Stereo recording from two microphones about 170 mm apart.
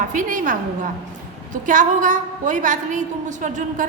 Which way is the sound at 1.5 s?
50° right (ahead or behind).